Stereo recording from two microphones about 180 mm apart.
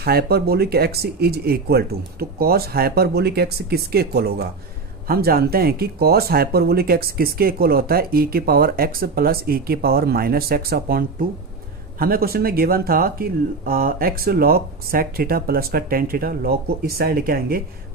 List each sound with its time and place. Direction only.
0.0 s speech: 60° right (ahead or behind)